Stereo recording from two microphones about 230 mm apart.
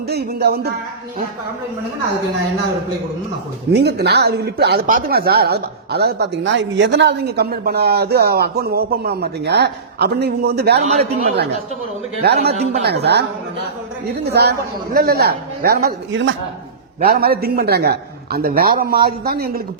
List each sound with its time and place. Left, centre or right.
0.1 s speech: right
3.7 s speech: right
10.8 s a man's voice: right
12.2 s a man's voice: right